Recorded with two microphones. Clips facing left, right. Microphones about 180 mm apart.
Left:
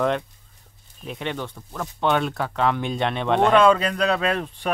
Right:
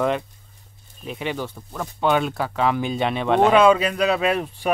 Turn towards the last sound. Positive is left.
turn(degrees=-10)  # may be behind; listen again after turning